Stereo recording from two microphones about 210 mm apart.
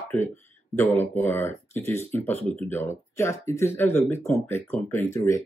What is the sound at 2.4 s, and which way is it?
Speech, 25° right (ahead or behind).